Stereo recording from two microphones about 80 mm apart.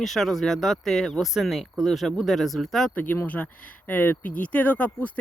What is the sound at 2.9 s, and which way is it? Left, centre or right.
Speech, left.